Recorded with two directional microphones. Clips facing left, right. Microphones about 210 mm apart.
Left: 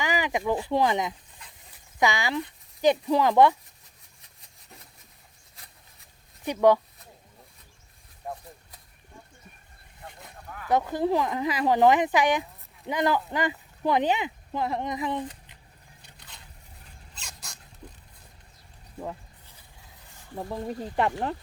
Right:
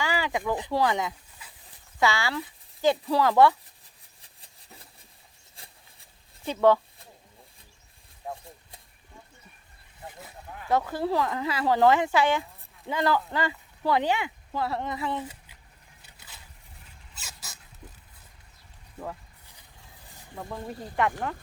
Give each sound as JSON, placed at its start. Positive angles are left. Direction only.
{"t": 0.0, "sound": "a sound", "side_deg": 15}
{"t": 0.7, "sound": "speech", "side_deg": 20}
{"t": 1.4, "sound": "dog", "side_deg": -5}
{"t": 2.0, "sound": "speech", "side_deg": 15}
{"t": 5.5, "sound": "a sound", "side_deg": -30}
{"t": 6.4, "sound": "speech", "side_deg": 15}
{"t": 8.2, "sound": "speech", "side_deg": 0}
{"t": 10.5, "sound": "a sound", "side_deg": -15}
{"t": 10.9, "sound": "speech", "side_deg": 15}
{"t": 15.2, "sound": "a sound", "side_deg": -5}
{"t": 17.2, "sound": "dog", "side_deg": -5}
{"t": 20.5, "sound": "speech", "side_deg": 30}